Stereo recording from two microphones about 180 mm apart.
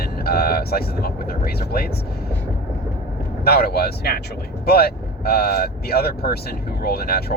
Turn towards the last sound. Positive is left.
turn(degrees=60)  # may be behind; listen again after turning